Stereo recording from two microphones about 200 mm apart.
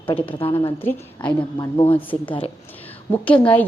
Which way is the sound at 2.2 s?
25° left (ahead or behind).